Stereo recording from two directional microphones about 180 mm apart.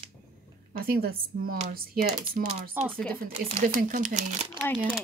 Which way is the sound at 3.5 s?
45° right (ahead or behind).